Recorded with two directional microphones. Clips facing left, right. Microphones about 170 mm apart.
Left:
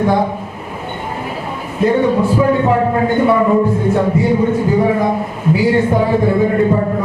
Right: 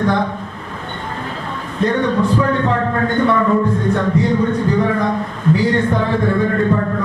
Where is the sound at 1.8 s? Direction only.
10° left (ahead or behind).